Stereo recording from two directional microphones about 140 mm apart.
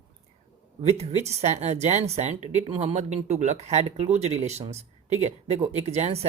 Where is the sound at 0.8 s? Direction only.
50° right (ahead or behind).